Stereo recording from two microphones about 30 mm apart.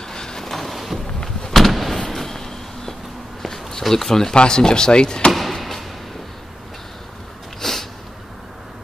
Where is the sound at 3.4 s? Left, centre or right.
Centre.